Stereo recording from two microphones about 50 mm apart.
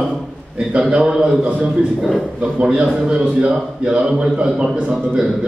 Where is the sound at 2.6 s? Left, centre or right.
Centre.